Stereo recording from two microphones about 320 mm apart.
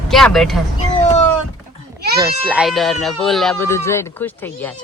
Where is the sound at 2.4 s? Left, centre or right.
Centre.